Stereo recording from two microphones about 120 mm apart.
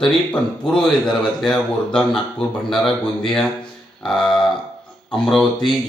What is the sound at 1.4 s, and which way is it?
A man's voice, 5° left (ahead or behind).